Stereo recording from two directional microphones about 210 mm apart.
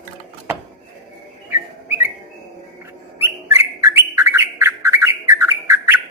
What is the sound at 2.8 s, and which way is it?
Bird, 10° right (ahead or behind).